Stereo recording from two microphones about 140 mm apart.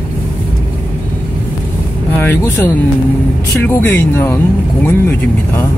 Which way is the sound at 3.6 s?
15° left (ahead or behind).